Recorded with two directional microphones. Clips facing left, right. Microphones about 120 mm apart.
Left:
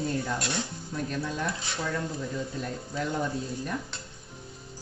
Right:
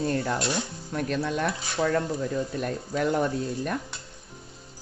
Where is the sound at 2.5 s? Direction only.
65° right (ahead or behind).